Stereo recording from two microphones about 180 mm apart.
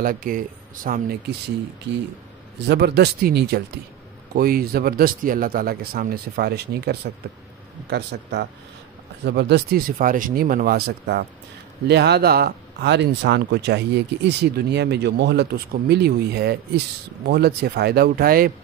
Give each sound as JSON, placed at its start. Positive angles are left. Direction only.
{"t": 0.0, "sound": "speech", "side_deg": -50}
{"t": 2.6, "sound": "speech", "side_deg": -70}